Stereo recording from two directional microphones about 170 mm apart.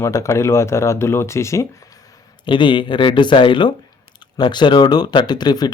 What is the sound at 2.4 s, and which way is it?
Speech, 30° left (ahead or behind).